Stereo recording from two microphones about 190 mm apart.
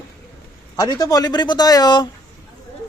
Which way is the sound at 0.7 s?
20° left (ahead or behind).